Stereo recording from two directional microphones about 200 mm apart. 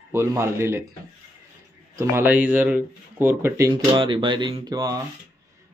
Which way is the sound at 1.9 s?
10° right (ahead or behind).